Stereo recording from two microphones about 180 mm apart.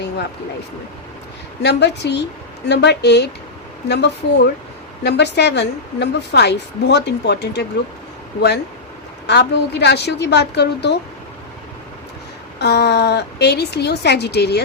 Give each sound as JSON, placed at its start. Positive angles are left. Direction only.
{"t": 1.6, "sound": "a woman's voice", "side_deg": 70}
{"t": 12.5, "sound": "a woman's voice", "side_deg": 70}